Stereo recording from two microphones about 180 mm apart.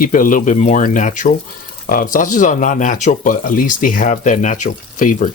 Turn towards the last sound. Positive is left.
turn(degrees=45)  # may be behind; listen again after turning